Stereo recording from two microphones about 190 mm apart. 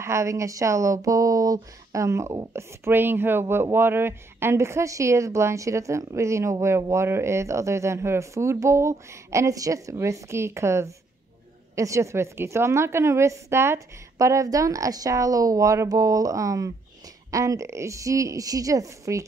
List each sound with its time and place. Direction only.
0.0 s speech: 15° right (ahead or behind)